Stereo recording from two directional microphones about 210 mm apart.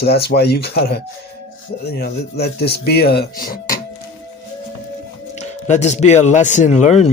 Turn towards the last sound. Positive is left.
turn(degrees=35)  # may be behind; listen again after turning